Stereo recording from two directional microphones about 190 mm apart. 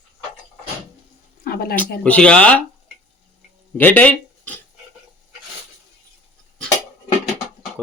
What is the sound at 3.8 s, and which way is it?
Speech, 10° left (ahead or behind).